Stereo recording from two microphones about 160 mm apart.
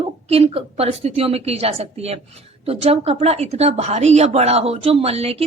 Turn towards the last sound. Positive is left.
turn(degrees=-40)  # may be behind; listen again after turning